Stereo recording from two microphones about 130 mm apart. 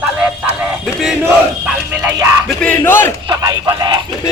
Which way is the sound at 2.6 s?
15° left (ahead or behind).